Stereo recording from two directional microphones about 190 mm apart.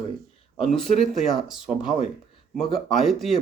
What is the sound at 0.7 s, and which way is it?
Speech, centre (ahead or behind).